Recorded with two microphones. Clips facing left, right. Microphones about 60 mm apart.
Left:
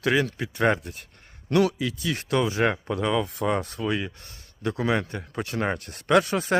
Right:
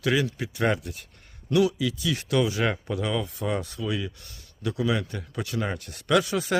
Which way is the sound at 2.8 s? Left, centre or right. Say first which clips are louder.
Left 3 dB; left.